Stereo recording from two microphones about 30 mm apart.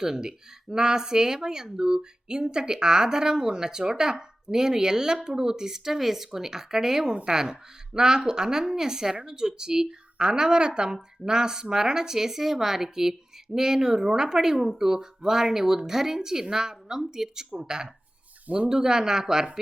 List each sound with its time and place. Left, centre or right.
0.0 s a woman's voice: right